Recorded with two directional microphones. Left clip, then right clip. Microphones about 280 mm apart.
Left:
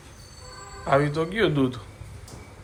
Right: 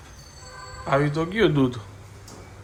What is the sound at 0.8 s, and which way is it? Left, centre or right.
Speech, centre.